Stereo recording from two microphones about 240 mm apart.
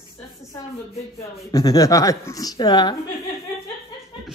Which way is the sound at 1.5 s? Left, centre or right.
Centre.